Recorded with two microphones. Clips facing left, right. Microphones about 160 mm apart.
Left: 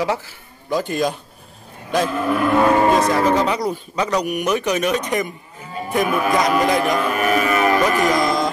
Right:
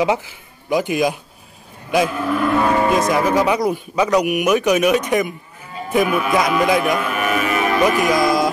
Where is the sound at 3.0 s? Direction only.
15° right (ahead or behind).